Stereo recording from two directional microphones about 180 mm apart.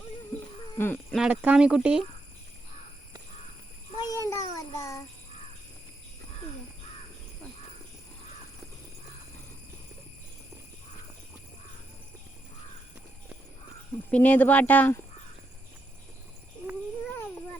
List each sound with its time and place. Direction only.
0.8 s speech: 10° left (ahead or behind)
1.1 s speech: 5° right (ahead or behind)
3.9 s child singing: 20° left (ahead or behind)
14.1 s speech: 10° left (ahead or behind)
16.6 s babbling: 10° right (ahead or behind)